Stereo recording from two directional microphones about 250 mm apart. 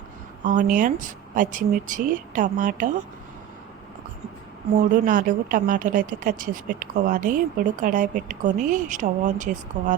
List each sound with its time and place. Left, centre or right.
0.4 s a woman's voice: right
5.0 s a woman's voice: right